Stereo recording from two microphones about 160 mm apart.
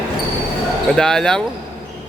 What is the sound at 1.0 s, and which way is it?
Speech, 5° left (ahead or behind).